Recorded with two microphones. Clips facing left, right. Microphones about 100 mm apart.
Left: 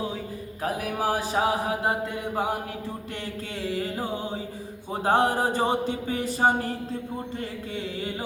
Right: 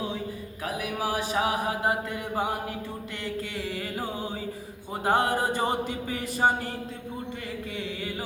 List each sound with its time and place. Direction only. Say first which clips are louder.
0.6 s a sound: left 3 dB; 40° left (ahead or behind)
3.8 s music: left 3 dB; 25° left (ahead or behind)
5.0 s chant: left 2 dB; 35° left (ahead or behind)